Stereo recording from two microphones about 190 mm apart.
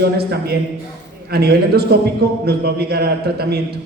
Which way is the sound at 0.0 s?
60° right (ahead or behind).